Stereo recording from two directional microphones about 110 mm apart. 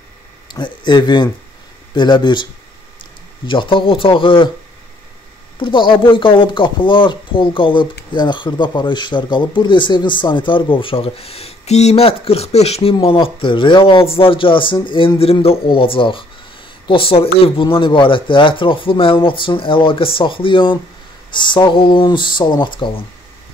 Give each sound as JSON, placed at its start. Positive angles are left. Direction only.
{"t": 0.5, "sound": "speech", "side_deg": 45}
{"t": 3.4, "sound": "speech", "side_deg": 50}
{"t": 5.6, "sound": "speech", "side_deg": 50}
{"t": 13.0, "sound": "speech", "side_deg": 55}